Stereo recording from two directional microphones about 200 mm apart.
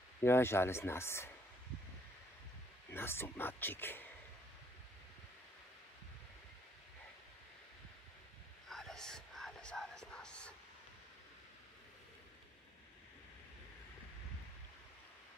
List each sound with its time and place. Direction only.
0.2 s speech: 10° left (ahead or behind)
2.9 s speech: 10° left (ahead or behind)
8.6 s whispering: centre (ahead or behind)